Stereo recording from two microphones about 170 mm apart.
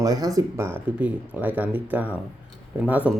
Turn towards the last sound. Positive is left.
turn(degrees=-10)  # may be behind; listen again after turning